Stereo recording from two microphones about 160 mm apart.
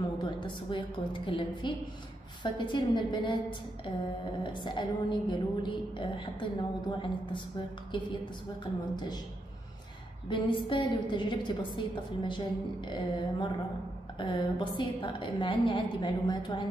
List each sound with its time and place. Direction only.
0.0 s a woman's voice: 30° left (ahead or behind)
10.3 s a woman's voice: 30° left (ahead or behind)